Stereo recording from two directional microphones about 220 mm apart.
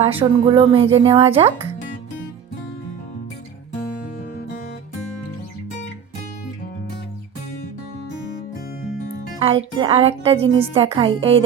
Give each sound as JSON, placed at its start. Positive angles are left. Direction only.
{"t": 0.0, "sound": "speech", "side_deg": -25}
{"t": 9.4, "sound": "speech", "side_deg": -25}